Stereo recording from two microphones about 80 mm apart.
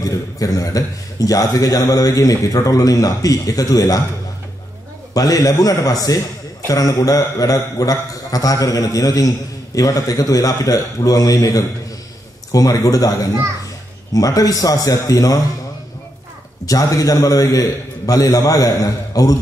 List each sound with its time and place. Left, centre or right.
0.0 s a man's voice: left
5.1 s a man's voice: left
16.6 s a man's voice: left